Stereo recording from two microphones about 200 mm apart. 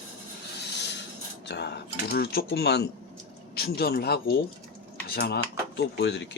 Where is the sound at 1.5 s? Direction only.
55° left (ahead or behind).